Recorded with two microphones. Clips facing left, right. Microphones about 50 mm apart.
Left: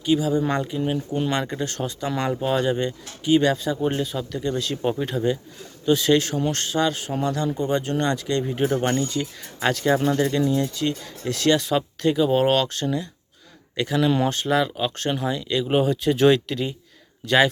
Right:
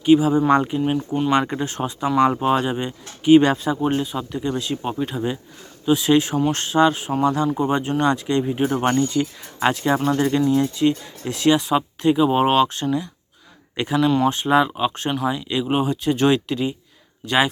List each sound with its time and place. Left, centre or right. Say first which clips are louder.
0.0 s speech: right 6 dB; right
3.2 s speech: right 5 dB; right
3.8 s speech: right 2 dB; centre
6.5 s speech: right 7 dB; right; by 8.9 s centre
8.9 s speech: right 4 dB; right
13.8 s speech: even; right
14.3 s speech: right 4 dB; centre
14.5 s speech: right 5 dB; right